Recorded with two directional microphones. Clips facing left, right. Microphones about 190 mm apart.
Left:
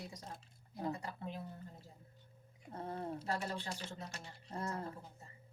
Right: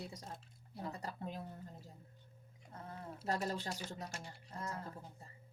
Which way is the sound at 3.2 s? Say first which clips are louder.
Right 5 dB; 40° right (ahead or behind).